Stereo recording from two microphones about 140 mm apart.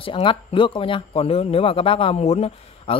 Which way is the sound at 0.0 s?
35° left (ahead or behind).